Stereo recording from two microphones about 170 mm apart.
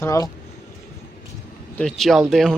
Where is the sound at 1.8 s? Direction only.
Centre (ahead or behind).